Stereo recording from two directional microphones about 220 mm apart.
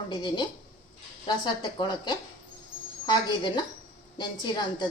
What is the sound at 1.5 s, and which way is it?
A woman's voice, 20° left (ahead or behind).